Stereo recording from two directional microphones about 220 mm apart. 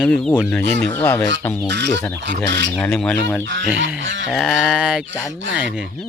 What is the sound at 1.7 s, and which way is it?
Speech, 50° right (ahead or behind).